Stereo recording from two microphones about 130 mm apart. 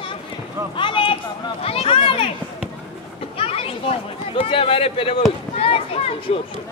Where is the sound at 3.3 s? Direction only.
50° left (ahead or behind).